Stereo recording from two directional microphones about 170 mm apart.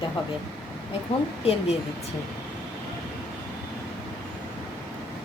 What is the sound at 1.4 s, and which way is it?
Speech, 35° left (ahead or behind).